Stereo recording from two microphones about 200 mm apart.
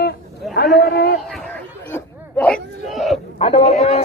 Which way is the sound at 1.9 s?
10° left (ahead or behind).